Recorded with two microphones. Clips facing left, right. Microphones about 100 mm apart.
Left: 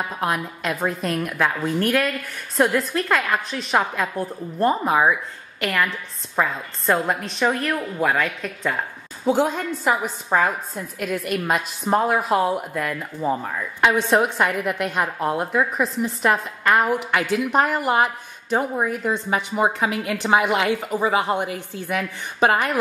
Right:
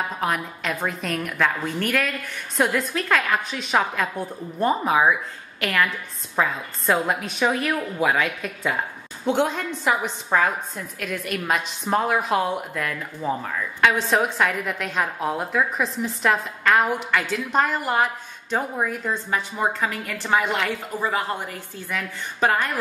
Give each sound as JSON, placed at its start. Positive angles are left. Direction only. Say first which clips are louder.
{"t": 0.2, "sound": "a woman's voice", "louder": "left 1 dB", "side_deg": 5}
{"t": 13.5, "sound": "a woman's voice", "louder": "right 2 dB", "side_deg": 20}
{"t": 14.0, "sound": "a woman's voice", "louder": "left 2 dB", "side_deg": 0}